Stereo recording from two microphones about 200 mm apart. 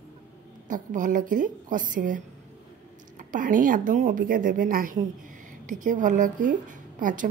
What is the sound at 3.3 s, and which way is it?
A woman's voice, 40° right (ahead or behind).